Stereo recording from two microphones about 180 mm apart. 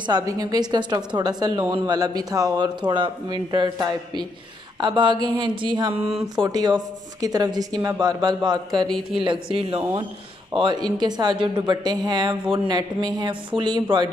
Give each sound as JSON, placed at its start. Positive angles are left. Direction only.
{"t": 0.0, "sound": "a woman's voice", "side_deg": -20}
{"t": 8.8, "sound": "speech", "side_deg": 5}
{"t": 9.2, "sound": "a woman's voice", "side_deg": -30}